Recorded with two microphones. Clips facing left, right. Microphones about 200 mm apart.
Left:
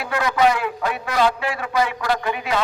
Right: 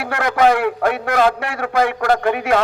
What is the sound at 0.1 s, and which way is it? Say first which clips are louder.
A man's voice: right 3 dB; 55° right (ahead or behind).